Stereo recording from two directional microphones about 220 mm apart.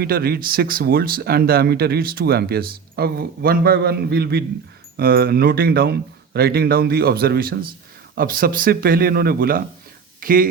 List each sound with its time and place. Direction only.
0.0 s speech: 45° right (ahead or behind)